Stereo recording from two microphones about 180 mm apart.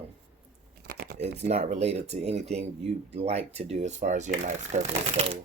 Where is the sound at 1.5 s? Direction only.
35° right (ahead or behind).